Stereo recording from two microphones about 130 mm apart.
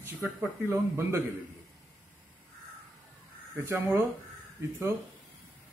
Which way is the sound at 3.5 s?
15° right (ahead or behind).